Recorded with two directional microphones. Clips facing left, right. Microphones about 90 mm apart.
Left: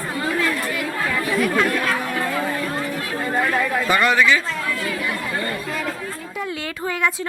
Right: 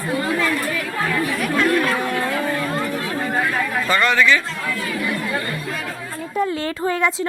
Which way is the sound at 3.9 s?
15° left (ahead or behind).